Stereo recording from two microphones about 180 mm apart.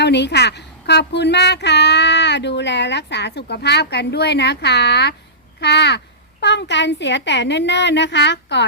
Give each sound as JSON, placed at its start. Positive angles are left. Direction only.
{"t": 0.0, "sound": "speech", "side_deg": 70}